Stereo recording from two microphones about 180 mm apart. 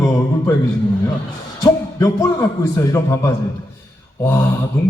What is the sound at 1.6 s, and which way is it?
A man's voice, 20° left (ahead or behind).